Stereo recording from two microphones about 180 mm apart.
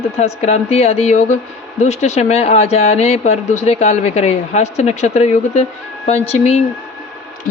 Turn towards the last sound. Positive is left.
turn(degrees=35)  # may be behind; listen again after turning